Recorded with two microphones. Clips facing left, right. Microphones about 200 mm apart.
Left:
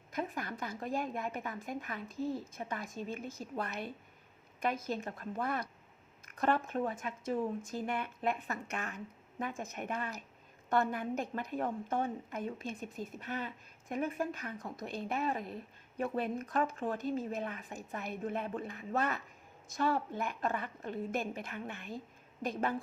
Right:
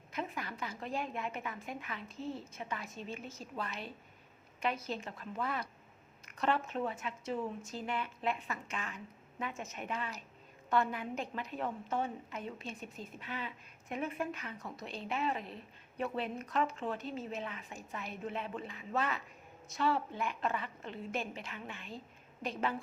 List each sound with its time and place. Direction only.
0.2 s speech: 45° left (ahead or behind)
9.4 s a woman's voice: 35° left (ahead or behind)
9.7 s a woman's voice: 50° left (ahead or behind)
14.8 s speech: 50° left (ahead or behind)